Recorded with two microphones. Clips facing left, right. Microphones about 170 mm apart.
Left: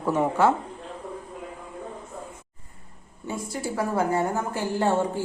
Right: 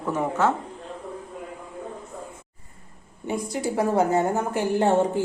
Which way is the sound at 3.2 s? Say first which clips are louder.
Right 4 dB; 15° right (ahead or behind).